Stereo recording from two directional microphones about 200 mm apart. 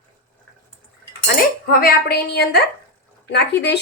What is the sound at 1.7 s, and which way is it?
A woman's voice, 45° left (ahead or behind).